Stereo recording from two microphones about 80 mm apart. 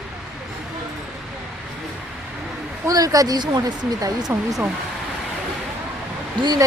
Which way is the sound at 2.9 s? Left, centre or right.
Right.